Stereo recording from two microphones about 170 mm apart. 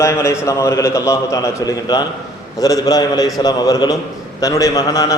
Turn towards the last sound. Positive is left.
turn(degrees=20)  # may be behind; listen again after turning